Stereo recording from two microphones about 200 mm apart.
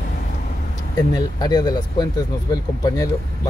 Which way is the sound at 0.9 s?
20° left (ahead or behind).